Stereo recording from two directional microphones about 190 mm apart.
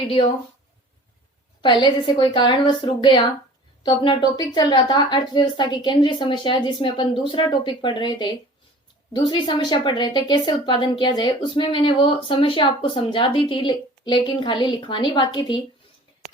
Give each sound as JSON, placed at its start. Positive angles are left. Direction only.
{"t": 1.6, "sound": "a woman's voice", "side_deg": 25}